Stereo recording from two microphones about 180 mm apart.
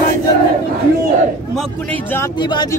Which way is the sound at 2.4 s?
25° left (ahead or behind).